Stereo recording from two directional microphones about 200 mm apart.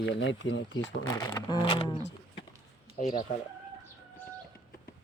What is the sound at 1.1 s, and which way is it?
Speech, 20° left (ahead or behind).